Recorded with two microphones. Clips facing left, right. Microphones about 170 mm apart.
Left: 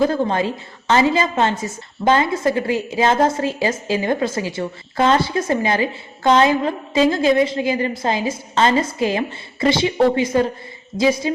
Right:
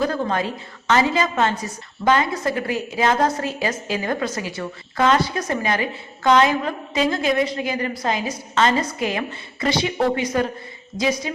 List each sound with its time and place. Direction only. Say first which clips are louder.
0.0 s a woman's voice: left 4 dB; 30° left (ahead or behind)